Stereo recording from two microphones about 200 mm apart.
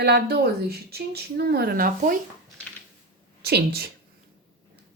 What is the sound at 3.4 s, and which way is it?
Speech, 55° right (ahead or behind).